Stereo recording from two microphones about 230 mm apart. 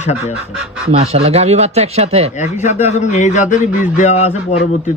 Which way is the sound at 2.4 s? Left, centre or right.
Left.